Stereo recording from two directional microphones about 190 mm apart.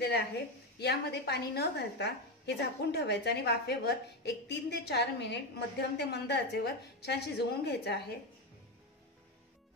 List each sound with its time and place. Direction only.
0.7 s a woman's voice: 60° left (ahead or behind)